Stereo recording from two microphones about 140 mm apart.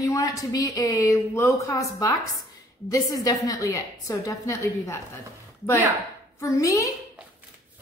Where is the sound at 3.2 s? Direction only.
25° left (ahead or behind).